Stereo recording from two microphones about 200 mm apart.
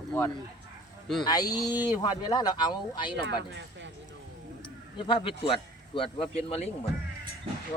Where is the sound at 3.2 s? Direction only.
60° right (ahead or behind).